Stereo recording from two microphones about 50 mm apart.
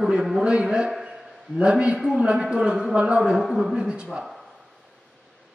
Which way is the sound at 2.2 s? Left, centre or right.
Right.